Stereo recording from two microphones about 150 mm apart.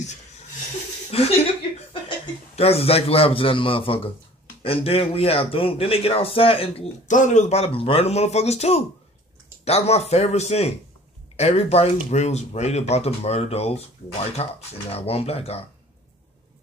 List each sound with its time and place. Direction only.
1.1 s a man's voice: 40° left (ahead or behind)
7.1 s speech: 55° left (ahead or behind)